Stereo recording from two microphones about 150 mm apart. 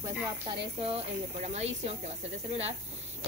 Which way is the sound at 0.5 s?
40° right (ahead or behind).